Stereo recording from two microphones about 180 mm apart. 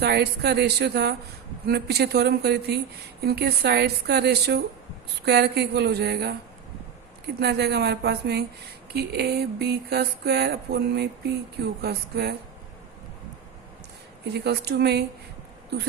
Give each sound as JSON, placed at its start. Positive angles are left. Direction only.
{"t": 0.0, "sound": "speech", "side_deg": -65}
{"t": 7.3, "sound": "speech", "side_deg": -65}
{"t": 14.3, "sound": "speech", "side_deg": -65}